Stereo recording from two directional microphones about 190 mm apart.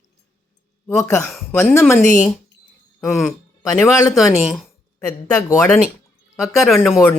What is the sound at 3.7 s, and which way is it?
Speech, 15° left (ahead or behind).